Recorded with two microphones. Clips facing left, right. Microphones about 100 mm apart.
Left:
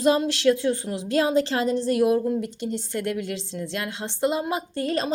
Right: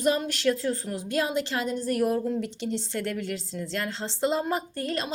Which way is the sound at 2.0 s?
10° left (ahead or behind).